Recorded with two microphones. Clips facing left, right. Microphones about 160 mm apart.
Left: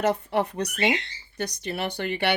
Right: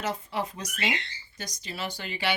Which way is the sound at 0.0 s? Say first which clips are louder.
Left 7 dB; 55° left (ahead or behind).